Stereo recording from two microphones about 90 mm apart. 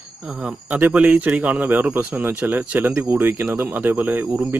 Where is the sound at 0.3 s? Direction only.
10° right (ahead or behind).